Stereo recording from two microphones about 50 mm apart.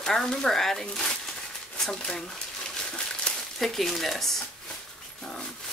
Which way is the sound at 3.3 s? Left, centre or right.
Centre.